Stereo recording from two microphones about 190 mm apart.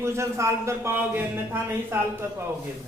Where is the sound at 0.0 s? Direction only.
15° right (ahead or behind).